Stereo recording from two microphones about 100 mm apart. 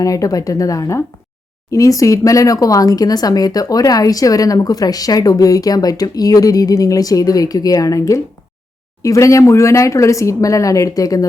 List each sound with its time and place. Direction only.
0.0 s speech: 35° left (ahead or behind)